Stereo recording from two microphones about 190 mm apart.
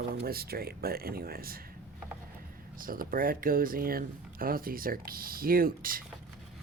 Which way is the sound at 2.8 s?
50° right (ahead or behind).